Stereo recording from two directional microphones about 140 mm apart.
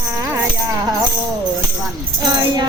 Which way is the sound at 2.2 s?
30° right (ahead or behind).